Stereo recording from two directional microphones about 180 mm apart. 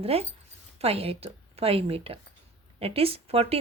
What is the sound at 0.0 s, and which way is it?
Speech, 35° right (ahead or behind).